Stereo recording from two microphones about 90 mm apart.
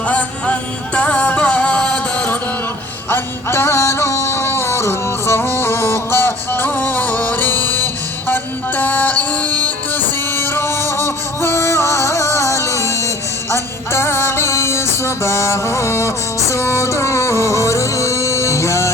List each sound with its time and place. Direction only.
0.1 s music: 15° left (ahead or behind); by 18.9 s 35° left (ahead or behind)